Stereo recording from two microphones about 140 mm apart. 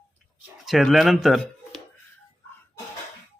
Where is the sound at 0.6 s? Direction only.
Centre (ahead or behind).